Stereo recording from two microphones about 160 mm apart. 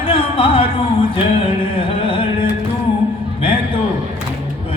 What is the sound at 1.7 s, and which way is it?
Music, 35° left (ahead or behind).